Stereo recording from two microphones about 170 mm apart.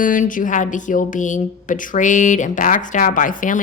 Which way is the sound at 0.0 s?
50° left (ahead or behind).